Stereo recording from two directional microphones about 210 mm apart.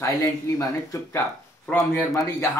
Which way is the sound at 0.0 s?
15° left (ahead or behind).